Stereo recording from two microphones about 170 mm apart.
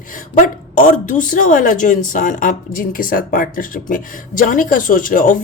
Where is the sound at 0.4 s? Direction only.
50° left (ahead or behind).